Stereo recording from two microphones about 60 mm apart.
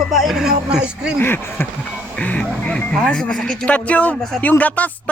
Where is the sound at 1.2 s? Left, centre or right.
Left.